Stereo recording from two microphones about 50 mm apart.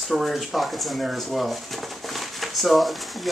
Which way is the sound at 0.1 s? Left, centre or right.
Centre.